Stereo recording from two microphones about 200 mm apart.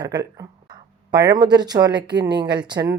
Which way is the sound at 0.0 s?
20° right (ahead or behind).